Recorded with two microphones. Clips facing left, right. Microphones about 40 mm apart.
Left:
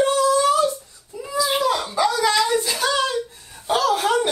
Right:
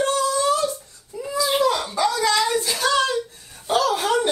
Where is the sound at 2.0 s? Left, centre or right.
Left.